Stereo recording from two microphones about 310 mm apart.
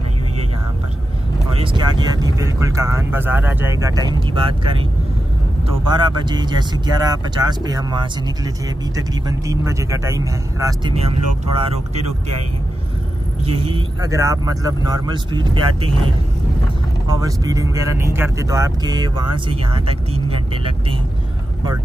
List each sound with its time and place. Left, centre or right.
1.6 s speech: centre
5.9 s speech: centre
9.5 s speech: centre
13.4 s speech: centre
17.2 s speech: centre